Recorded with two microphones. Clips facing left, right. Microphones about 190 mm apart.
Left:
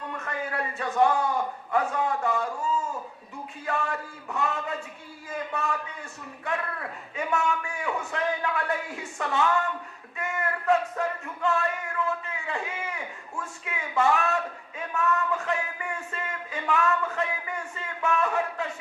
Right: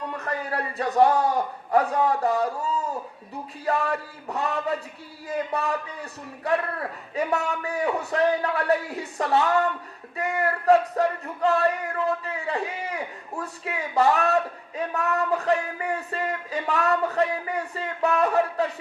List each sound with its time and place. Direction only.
0.2 s a man's voice: 35° right (ahead or behind)